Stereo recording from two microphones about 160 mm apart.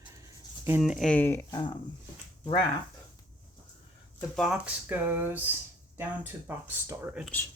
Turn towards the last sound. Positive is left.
turn(degrees=-15)  # may be behind; listen again after turning